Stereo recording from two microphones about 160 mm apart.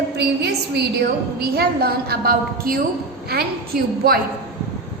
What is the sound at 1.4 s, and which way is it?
A woman's voice, 75° right (ahead or behind).